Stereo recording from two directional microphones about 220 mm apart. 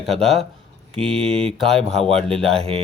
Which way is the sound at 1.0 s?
5° left (ahead or behind).